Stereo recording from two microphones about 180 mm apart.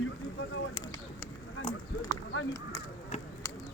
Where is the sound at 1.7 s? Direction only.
30° left (ahead or behind).